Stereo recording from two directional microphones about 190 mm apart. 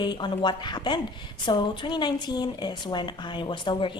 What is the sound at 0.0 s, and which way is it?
A woman's voice, 25° left (ahead or behind).